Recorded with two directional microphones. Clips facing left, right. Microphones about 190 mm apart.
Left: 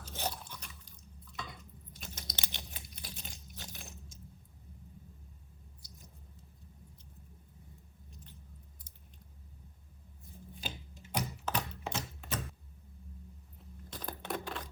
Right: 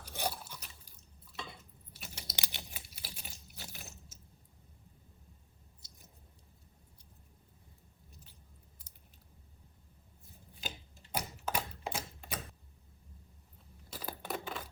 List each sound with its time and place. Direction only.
0.0 s a sound: 10° right (ahead or behind)
0.9 s drip: 5° right (ahead or behind)
1.9 s crunch: 5° right (ahead or behind)
5.8 s squish: 20° right (ahead or behind)
11.1 s a sound: 10° right (ahead or behind)
13.9 s coin: 5° right (ahead or behind)